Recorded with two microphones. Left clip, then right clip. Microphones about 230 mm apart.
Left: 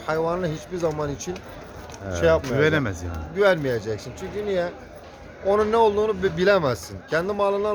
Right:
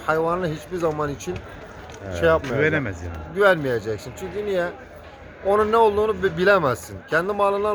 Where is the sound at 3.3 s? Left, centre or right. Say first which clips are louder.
Right 2 dB; centre.